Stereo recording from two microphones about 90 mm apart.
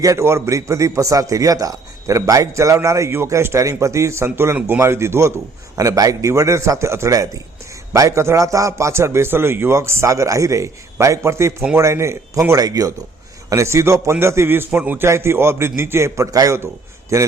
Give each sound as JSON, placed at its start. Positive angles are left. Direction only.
{"t": 0.0, "sound": "a man's voice", "side_deg": -35}